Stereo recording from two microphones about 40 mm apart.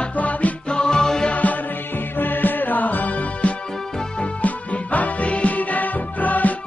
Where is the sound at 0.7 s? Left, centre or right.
Left.